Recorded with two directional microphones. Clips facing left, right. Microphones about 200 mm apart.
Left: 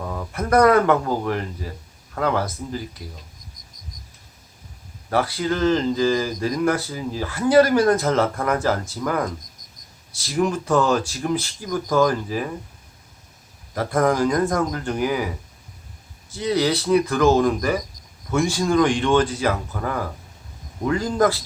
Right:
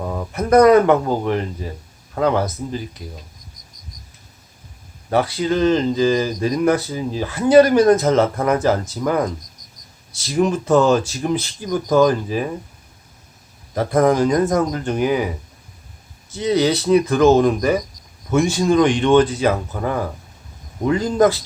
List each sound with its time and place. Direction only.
0.0 s speech: 20° right (ahead or behind)
5.1 s speech: 20° right (ahead or behind)
13.7 s speech: 20° right (ahead or behind)
16.3 s speech: 20° right (ahead or behind)